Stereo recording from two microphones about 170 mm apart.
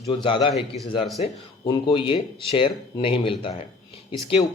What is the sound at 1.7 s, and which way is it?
A man's voice, 30° left (ahead or behind).